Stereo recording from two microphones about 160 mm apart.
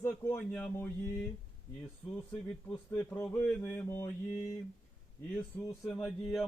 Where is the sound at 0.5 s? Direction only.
10° left (ahead or behind).